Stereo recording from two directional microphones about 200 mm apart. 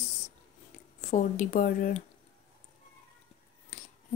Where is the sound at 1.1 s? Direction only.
40° left (ahead or behind).